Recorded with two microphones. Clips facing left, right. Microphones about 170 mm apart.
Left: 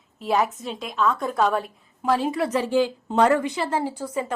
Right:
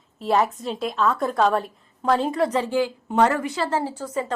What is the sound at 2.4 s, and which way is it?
Speech, 30° right (ahead or behind).